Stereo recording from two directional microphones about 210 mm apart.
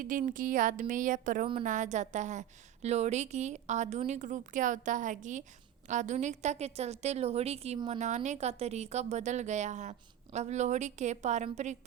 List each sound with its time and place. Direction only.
0.0 s a woman's voice: 40° right (ahead or behind)